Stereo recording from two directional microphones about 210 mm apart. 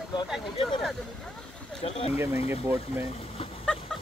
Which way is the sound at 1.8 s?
30° left (ahead or behind).